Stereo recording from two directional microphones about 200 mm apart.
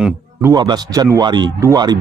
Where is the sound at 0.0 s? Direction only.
15° right (ahead or behind).